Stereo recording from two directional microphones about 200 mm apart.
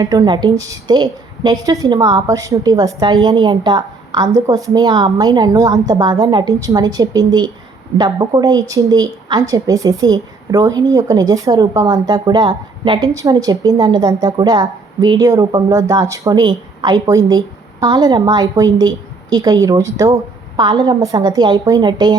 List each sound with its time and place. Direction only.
0.0 s a woman's voice: 20° right (ahead or behind)